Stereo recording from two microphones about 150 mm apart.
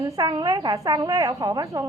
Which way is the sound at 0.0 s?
25° right (ahead or behind).